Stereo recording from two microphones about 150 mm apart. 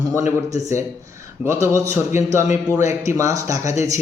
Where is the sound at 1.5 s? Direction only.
20° right (ahead or behind).